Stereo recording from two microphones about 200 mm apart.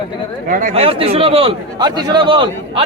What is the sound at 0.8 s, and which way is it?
A man's voice, 30° right (ahead or behind).